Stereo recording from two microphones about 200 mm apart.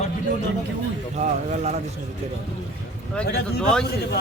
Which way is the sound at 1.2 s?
35° right (ahead or behind).